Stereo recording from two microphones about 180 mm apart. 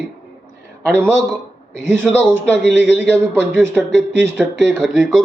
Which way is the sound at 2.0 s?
5° left (ahead or behind).